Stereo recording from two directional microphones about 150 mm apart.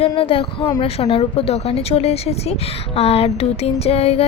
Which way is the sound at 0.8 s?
40° left (ahead or behind).